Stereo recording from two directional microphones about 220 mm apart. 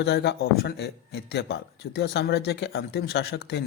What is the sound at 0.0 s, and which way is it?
Speech, 50° left (ahead or behind).